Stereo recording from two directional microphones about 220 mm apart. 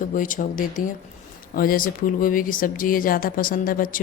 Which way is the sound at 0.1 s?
35° left (ahead or behind).